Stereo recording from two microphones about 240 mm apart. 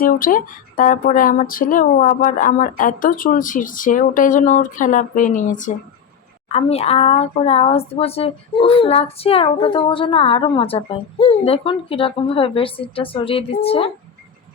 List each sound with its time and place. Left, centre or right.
0.0 s speech: left